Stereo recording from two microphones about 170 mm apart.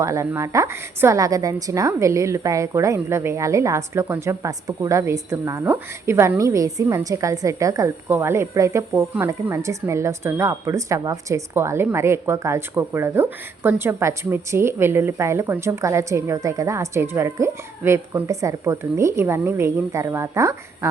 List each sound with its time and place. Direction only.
0.0 s a woman's voice: 20° right (ahead or behind)